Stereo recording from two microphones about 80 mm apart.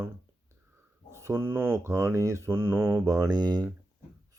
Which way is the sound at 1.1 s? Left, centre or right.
Right.